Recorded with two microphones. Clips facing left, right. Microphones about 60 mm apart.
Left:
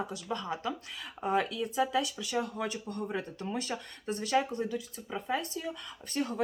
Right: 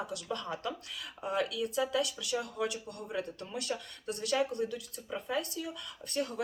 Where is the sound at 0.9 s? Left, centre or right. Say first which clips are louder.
Left 4 dB; left.